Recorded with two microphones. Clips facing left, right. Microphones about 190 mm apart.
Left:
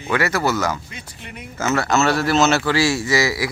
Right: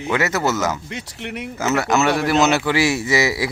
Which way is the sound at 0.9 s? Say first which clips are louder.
Right 8 dB; 75° right (ahead or behind).